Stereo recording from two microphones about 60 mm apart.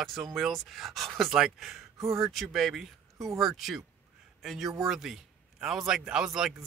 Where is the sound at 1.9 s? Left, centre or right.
Right.